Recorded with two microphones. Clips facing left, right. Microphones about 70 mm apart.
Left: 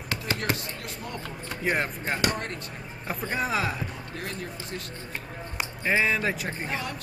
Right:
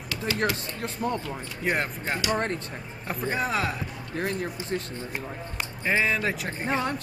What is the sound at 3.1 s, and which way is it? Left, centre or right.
Speech, centre.